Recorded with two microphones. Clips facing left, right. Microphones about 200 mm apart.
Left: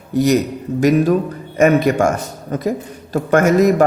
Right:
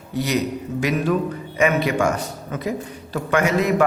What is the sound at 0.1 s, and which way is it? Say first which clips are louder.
A man's voice: left 7 dB; 45° left (ahead or behind).